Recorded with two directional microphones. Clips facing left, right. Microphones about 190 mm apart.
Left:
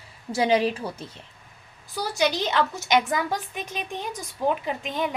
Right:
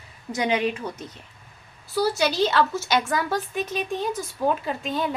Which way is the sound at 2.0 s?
15° left (ahead or behind).